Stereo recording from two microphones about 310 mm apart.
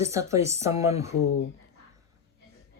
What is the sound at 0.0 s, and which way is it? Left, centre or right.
Speech, centre.